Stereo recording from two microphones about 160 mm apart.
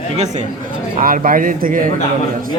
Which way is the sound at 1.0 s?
60° right (ahead or behind).